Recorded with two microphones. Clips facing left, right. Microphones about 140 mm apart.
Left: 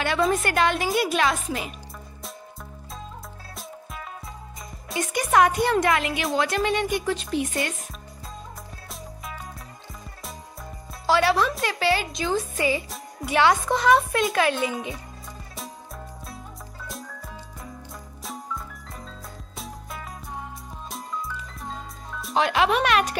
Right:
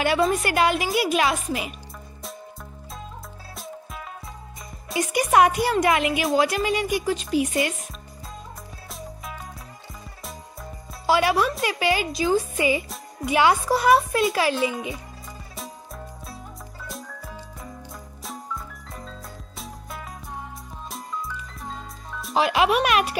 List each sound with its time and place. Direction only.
0.2 s a woman's voice: centre (ahead or behind)
3.5 s music: centre (ahead or behind)
4.8 s speech: centre (ahead or behind)
5.2 s speech: 20° right (ahead or behind)
5.5 s a woman's voice: 5° right (ahead or behind)
5.9 s speech: 20° right (ahead or behind)
6.2 s speech: 5° right (ahead or behind)
8.9 s music: centre (ahead or behind)
11.1 s a woman's voice: 10° right (ahead or behind)
16.8 s jingle: centre (ahead or behind)
18.2 s music: centre (ahead or behind)
22.5 s a woman's voice: 10° right (ahead or behind)